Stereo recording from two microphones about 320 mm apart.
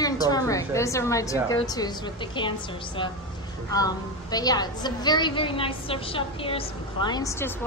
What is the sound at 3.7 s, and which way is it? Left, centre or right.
A woman's voice, centre.